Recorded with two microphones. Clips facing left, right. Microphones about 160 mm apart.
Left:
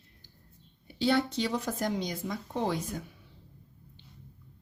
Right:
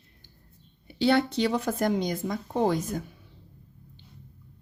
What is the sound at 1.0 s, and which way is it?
Speech, 70° right (ahead or behind).